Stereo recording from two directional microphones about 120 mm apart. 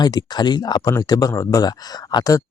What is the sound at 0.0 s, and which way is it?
Speech, 35° left (ahead or behind).